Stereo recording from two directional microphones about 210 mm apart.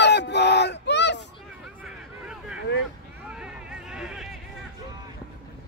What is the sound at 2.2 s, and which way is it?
Vehicle, 5° right (ahead or behind).